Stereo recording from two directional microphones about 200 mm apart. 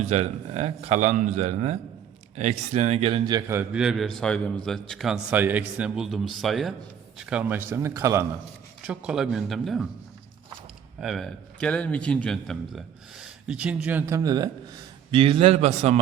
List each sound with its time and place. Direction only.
0.0 s a man's voice: 35° right (ahead or behind)
3.5 s a man's voice: 5° right (ahead or behind)
11.0 s a man's voice: centre (ahead or behind); by 16.0 s 35° right (ahead or behind)